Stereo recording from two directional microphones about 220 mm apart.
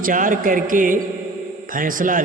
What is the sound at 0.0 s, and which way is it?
A man's voice, 40° right (ahead or behind).